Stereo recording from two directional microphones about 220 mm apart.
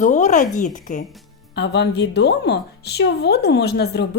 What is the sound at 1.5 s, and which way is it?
A woman's voice, 50° left (ahead or behind).